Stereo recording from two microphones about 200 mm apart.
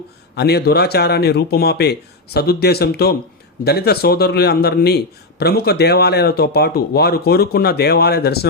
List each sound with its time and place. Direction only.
0.3 s a man's voice: 55° left (ahead or behind)